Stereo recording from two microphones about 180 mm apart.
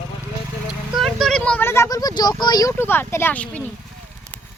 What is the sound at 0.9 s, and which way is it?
Speech, centre (ahead or behind).